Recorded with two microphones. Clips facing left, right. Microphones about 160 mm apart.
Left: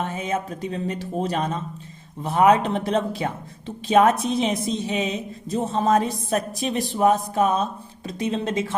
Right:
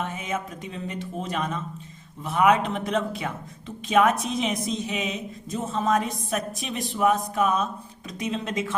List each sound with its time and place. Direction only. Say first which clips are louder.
0.0 s a woman's voice: left 4 dB; 35° left (ahead or behind)